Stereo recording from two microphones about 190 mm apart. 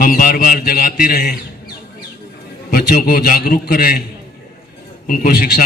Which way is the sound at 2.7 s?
50° left (ahead or behind).